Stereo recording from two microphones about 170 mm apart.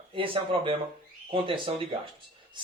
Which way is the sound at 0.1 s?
30° right (ahead or behind).